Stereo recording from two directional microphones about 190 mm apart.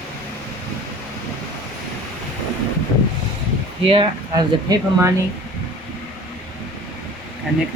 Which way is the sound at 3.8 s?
25° right (ahead or behind).